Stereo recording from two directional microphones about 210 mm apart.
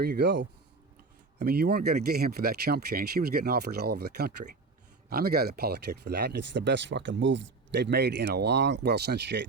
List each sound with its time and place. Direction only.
0.0 s speech: 50° right (ahead or behind)
1.5 s speech: 45° right (ahead or behind)